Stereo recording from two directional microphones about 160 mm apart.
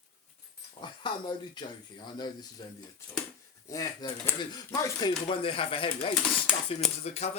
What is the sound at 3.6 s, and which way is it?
Speech, 20° left (ahead or behind).